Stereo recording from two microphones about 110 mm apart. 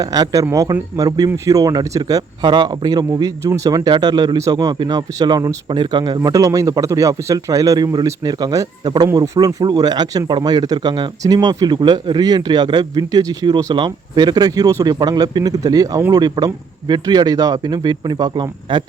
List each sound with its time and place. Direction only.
0.0 s speech: 35° right (ahead or behind)